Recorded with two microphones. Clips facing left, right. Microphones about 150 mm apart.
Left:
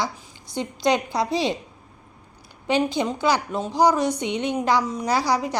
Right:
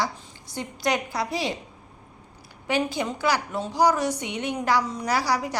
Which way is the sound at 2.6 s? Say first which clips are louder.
Left 4 dB; 20° left (ahead or behind).